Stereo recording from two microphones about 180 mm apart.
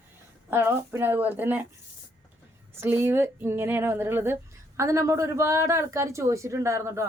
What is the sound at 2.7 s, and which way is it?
Speech, 15° right (ahead or behind).